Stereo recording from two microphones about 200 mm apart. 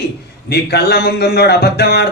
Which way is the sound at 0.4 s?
55° left (ahead or behind).